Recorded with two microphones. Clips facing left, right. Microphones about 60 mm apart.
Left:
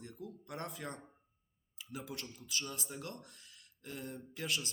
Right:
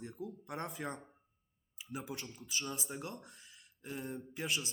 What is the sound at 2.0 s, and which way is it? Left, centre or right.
Speech, centre.